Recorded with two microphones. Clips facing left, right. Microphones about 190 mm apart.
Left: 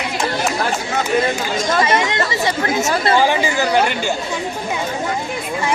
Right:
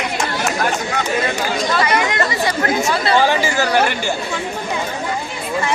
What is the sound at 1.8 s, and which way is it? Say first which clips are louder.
Chatter: left 1 dB; 25° left (ahead or behind).